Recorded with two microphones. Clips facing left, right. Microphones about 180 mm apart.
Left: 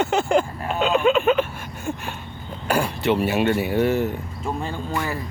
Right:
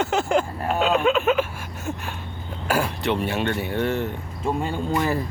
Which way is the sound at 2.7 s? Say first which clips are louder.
Left 2 dB; centre (ahead or behind).